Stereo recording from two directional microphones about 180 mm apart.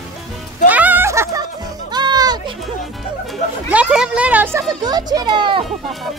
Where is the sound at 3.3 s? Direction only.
5° right (ahead or behind); by 5.6 s 25° right (ahead or behind).